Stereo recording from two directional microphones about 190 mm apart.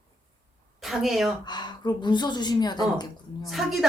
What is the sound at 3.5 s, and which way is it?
Speech, centre (ahead or behind).